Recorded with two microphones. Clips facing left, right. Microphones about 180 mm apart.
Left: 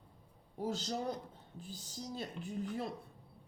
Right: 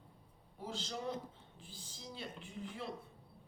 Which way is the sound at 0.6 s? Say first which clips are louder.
Left 5 dB; 40° left (ahead or behind).